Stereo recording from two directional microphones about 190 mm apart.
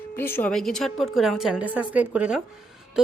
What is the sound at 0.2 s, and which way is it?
A woman's voice, 10° left (ahead or behind).